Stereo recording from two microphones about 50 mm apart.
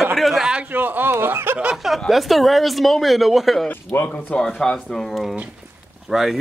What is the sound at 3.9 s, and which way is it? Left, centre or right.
Speech, left.